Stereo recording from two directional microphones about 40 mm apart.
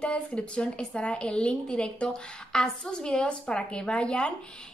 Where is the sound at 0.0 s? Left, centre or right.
Left.